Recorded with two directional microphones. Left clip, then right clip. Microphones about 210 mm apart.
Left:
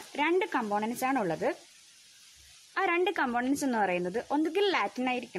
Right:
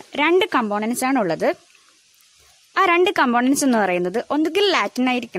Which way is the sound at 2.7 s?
50° right (ahead or behind).